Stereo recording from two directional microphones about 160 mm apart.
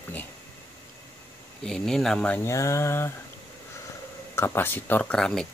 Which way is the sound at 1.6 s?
5° left (ahead or behind).